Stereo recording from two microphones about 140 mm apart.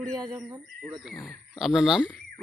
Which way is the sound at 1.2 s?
Centre (ahead or behind).